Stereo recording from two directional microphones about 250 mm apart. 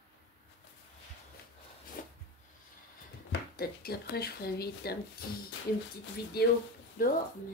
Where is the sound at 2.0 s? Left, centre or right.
Left.